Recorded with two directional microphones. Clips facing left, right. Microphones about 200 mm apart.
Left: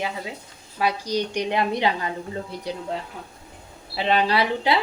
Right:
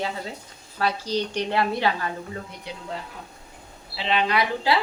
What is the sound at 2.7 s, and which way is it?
Speech, 40° left (ahead or behind).